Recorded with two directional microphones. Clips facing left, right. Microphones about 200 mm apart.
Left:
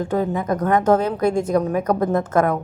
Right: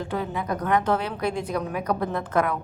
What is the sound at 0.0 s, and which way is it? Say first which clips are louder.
A woman's voice: left 7 dB; 45° left (ahead or behind).